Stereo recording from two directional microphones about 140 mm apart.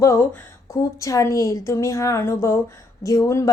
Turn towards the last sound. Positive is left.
turn(degrees=20)  # may be behind; listen again after turning